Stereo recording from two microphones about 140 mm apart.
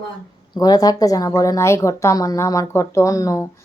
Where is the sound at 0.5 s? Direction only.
30° left (ahead or behind).